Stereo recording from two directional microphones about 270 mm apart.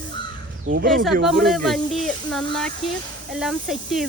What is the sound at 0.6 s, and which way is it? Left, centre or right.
Speech, right.